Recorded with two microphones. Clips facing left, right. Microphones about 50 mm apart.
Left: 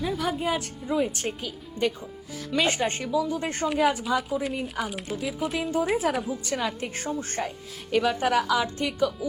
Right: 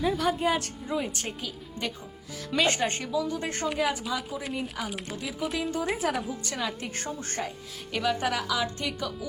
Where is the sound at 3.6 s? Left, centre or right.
Centre.